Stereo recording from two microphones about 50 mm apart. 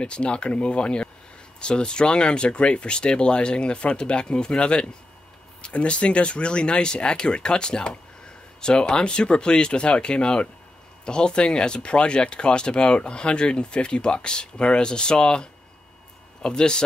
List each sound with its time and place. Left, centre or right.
0.0 s speech: left